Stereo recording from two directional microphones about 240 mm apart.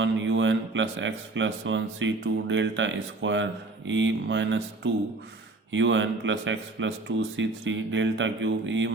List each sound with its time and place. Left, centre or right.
0.0 s speech: right